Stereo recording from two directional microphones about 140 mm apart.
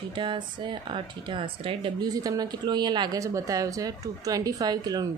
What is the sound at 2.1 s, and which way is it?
A woman's voice, 25° right (ahead or behind).